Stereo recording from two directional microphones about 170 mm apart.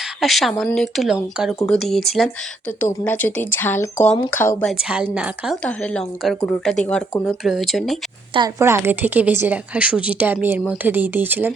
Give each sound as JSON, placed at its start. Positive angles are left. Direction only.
{"t": 0.0, "sound": "a sound", "side_deg": 0}
{"t": 0.6, "sound": "a woman's voice", "side_deg": 0}
{"t": 4.7, "sound": "a woman's voice", "side_deg": -5}
{"t": 5.6, "sound": "a woman's voice", "side_deg": 5}
{"t": 8.3, "sound": "speech", "side_deg": -25}
{"t": 8.5, "sound": "speech", "side_deg": -15}